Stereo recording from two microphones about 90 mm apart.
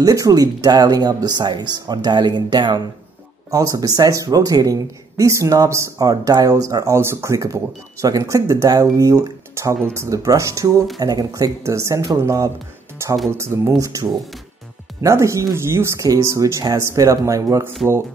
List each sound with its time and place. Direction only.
0.0 s speech: 40° right (ahead or behind)
3.4 s speech: 40° right (ahead or behind)
7.0 s speech: 30° right (ahead or behind)
11.0 s speech: 45° right (ahead or behind)